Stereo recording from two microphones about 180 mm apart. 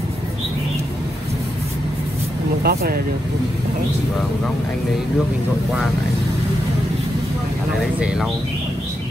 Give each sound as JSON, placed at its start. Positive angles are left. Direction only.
{"t": 2.6, "sound": "speech", "side_deg": -60}
{"t": 8.0, "sound": "speech", "side_deg": -5}